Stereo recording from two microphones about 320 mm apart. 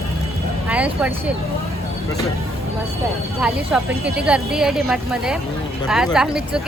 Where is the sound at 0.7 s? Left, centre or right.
Centre.